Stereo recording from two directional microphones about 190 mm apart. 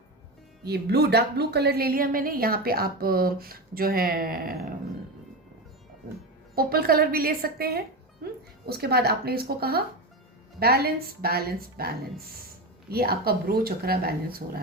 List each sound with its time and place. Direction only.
0.6 s speech: 60° right (ahead or behind)
6.6 s speech: 50° right (ahead or behind)